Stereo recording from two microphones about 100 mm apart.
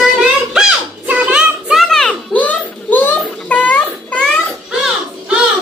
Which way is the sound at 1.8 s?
5° left (ahead or behind).